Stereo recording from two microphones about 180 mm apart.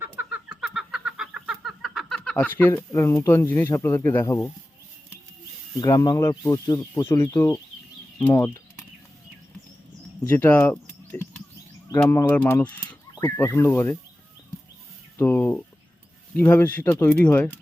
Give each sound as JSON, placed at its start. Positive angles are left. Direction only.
{"t": 0.0, "sound": "a sound", "side_deg": -10}
{"t": 5.8, "sound": "speech", "side_deg": 20}
{"t": 10.2, "sound": "bird", "side_deg": 10}
{"t": 12.0, "sound": "speech", "side_deg": 10}
{"t": 15.2, "sound": "speech", "side_deg": 10}